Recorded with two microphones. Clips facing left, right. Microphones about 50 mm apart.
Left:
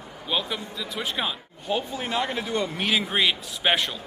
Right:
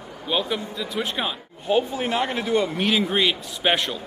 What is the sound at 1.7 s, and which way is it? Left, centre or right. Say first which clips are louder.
Speech: right 6 dB; centre.